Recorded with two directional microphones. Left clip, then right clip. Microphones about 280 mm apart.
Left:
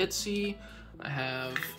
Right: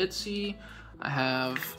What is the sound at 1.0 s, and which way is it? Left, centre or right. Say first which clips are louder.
Speech: right 6 dB; centre.